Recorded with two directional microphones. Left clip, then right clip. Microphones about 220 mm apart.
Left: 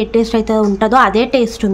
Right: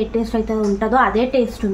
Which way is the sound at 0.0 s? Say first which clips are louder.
Left 6 dB; 45° left (ahead or behind).